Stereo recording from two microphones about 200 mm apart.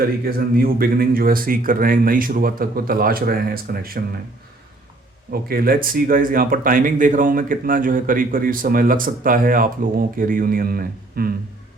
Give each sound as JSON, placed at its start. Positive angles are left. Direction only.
{"t": 0.3, "sound": "speech", "side_deg": -50}
{"t": 5.3, "sound": "speech", "side_deg": -50}